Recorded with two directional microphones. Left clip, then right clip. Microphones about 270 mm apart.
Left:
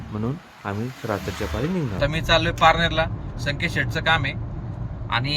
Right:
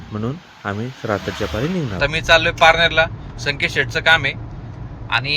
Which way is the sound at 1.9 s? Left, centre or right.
Centre.